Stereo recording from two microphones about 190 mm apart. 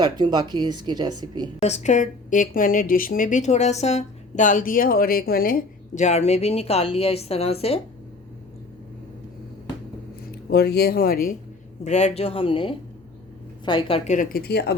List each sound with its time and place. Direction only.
0.0 s speech: 20° right (ahead or behind)
1.6 s a woman's voice: 35° left (ahead or behind)
10.5 s speech: 55° left (ahead or behind)
11.8 s a woman's voice: 35° left (ahead or behind); by 14.8 s 60° left (ahead or behind)